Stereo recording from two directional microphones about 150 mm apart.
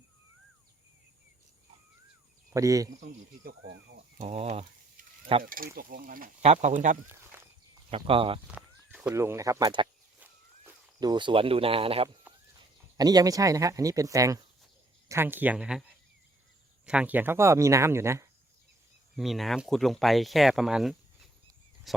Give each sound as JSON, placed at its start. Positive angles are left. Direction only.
{"t": 2.5, "sound": "speech", "side_deg": -20}
{"t": 4.2, "sound": "speech", "side_deg": -50}
{"t": 5.4, "sound": "speech", "side_deg": -70}
{"t": 6.4, "sound": "speech", "side_deg": -50}
{"t": 7.9, "sound": "speech", "side_deg": -40}
{"t": 9.1, "sound": "speech", "side_deg": -20}
{"t": 10.2, "sound": "walk", "side_deg": -10}
{"t": 11.0, "sound": "speech", "side_deg": -30}
{"t": 13.0, "sound": "speech", "side_deg": -25}
{"t": 16.8, "sound": "speech", "side_deg": -5}
{"t": 19.1, "sound": "speech", "side_deg": 0}